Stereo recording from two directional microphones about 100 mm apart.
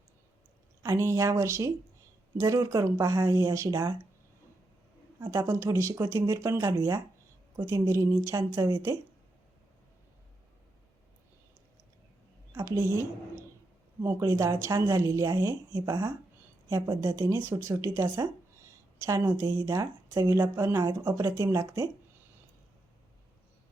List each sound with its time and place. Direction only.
0.8 s speech: 30° right (ahead or behind)
5.2 s speech: 25° right (ahead or behind)
12.5 s speech: 30° right (ahead or behind)